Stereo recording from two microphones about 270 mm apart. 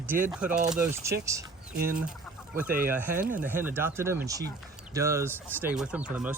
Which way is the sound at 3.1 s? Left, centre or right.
Right.